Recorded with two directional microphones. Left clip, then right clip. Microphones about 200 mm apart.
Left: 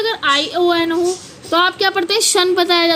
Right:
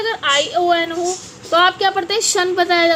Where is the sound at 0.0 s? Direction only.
55° left (ahead or behind).